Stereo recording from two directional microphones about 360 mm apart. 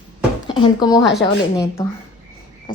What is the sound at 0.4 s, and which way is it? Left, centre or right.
Speech, centre.